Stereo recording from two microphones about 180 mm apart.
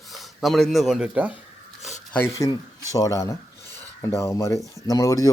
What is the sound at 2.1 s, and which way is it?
A man's voice, 15° left (ahead or behind).